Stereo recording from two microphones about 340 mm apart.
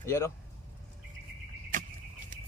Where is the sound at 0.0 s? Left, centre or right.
Centre.